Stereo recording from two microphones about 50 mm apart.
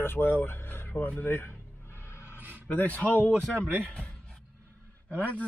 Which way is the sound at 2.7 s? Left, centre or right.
Left.